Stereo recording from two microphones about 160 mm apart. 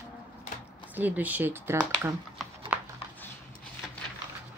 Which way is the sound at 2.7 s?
10° right (ahead or behind).